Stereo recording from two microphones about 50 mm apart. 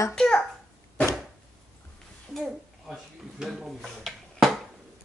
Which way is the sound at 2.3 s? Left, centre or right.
Centre.